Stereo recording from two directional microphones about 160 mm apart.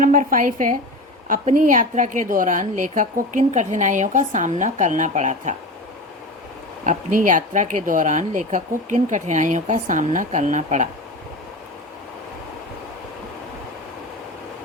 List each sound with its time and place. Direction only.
0.0 s a woman's voice: 60° right (ahead or behind)
6.8 s a woman's voice: 55° right (ahead or behind)